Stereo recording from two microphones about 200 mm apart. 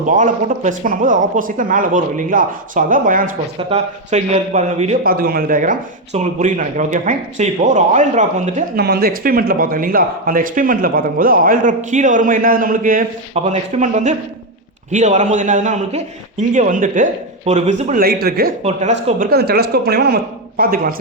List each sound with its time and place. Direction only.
0.2 s speech: 40° right (ahead or behind)
5.0 s speech: 45° right (ahead or behind)
8.7 s speech: 50° right (ahead or behind)
13.3 s speech: 35° right (ahead or behind); by 18.5 s 50° right (ahead or behind)
18.6 s speech: 35° right (ahead or behind)
19.3 s speech: 50° right (ahead or behind)